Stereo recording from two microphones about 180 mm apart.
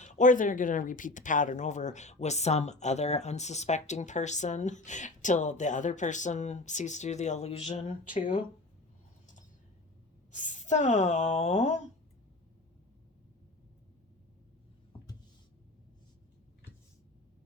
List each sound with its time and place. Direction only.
0.0 s speech: 45° left (ahead or behind)
10.3 s speech: 45° left (ahead or behind)